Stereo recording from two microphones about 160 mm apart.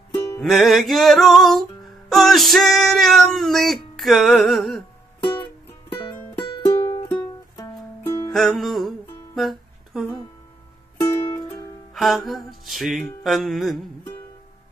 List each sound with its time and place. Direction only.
0.4 s music: centre (ahead or behind)
5.2 s music: 30° left (ahead or behind)
8.3 s music: centre (ahead or behind)
9.3 s a sound: centre (ahead or behind)
11.0 s music: 30° left (ahead or behind)
11.9 s music: centre (ahead or behind)